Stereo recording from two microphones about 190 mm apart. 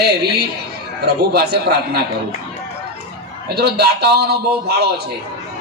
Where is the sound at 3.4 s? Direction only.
55° right (ahead or behind).